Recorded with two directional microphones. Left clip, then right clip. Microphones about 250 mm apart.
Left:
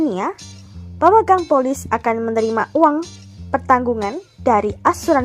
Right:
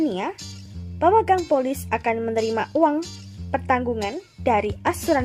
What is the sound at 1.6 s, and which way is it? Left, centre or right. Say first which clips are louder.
Speech: left 5 dB; centre.